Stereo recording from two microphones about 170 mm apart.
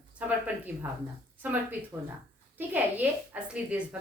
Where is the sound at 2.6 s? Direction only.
10° right (ahead or behind).